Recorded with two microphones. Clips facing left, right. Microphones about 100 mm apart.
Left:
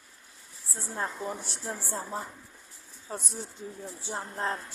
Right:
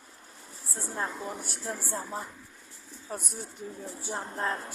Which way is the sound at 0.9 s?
30° left (ahead or behind).